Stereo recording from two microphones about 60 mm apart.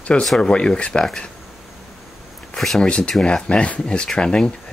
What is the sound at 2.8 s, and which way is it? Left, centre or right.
Speech, centre.